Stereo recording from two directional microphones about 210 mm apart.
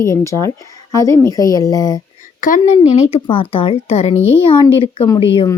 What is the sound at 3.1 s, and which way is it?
Speech, 25° left (ahead or behind).